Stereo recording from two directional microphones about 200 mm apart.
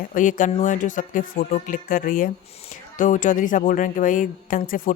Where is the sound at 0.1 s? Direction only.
40° left (ahead or behind).